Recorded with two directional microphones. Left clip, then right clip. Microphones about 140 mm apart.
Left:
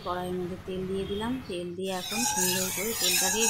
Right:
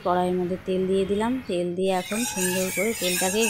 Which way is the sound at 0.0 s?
40° right (ahead or behind).